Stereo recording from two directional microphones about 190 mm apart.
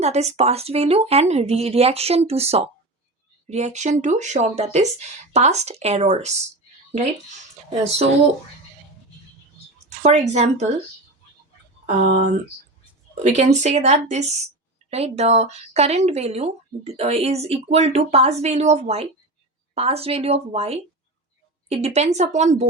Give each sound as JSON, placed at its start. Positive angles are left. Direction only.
{"t": 0.0, "sound": "speech", "side_deg": -35}
{"t": 10.0, "sound": "speech", "side_deg": -35}
{"t": 11.9, "sound": "speech", "side_deg": -35}